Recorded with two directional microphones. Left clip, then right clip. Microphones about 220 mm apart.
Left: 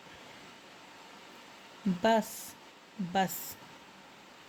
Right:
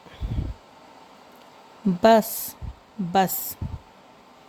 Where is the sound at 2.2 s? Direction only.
Centre (ahead or behind).